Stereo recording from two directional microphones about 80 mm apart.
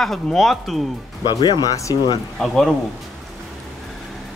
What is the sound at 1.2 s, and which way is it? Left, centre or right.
Speech, left.